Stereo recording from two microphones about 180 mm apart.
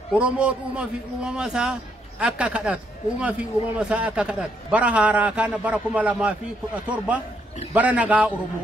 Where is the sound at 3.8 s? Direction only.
5° right (ahead or behind).